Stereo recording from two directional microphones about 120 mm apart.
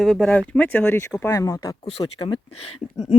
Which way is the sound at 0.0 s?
Centre (ahead or behind).